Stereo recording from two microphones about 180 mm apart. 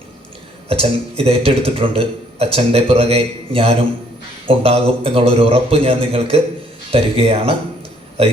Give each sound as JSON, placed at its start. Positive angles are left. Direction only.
{"t": 0.7, "sound": "speech", "side_deg": -30}